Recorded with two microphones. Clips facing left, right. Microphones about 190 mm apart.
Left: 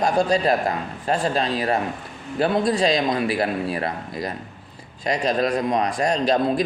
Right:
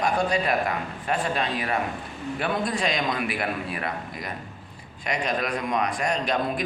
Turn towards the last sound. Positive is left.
turn(degrees=35)  # may be behind; listen again after turning